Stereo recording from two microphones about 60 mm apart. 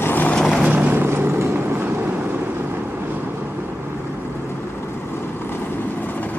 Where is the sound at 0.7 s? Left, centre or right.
Right.